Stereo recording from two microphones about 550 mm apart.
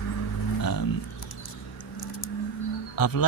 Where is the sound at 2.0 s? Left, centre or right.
Left.